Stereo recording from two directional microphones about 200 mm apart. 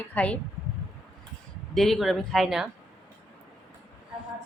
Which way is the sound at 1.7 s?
Centre (ahead or behind).